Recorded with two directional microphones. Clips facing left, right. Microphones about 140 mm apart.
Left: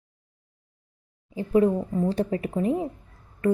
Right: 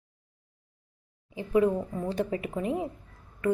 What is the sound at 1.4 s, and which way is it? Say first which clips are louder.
A woman's voice: left 3 dB; 35° left (ahead or behind).